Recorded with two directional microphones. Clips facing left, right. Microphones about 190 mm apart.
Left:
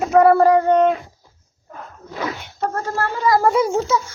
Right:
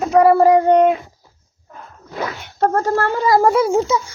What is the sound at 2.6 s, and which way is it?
Speech, 50° right (ahead or behind).